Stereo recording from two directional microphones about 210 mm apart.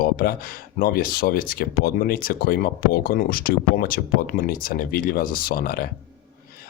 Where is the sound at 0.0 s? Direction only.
45° left (ahead or behind).